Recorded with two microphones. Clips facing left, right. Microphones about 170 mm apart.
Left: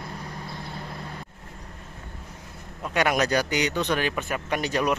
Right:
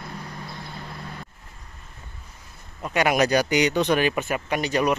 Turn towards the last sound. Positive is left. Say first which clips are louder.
# right 2 dB
turn(degrees=0)  # may be behind; listen again after turning